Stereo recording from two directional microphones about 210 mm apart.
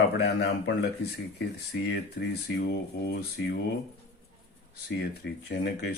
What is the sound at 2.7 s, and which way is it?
Speech, 50° left (ahead or behind).